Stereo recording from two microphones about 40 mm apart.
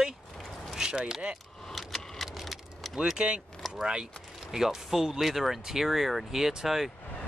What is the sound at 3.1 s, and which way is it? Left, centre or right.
Speech, right.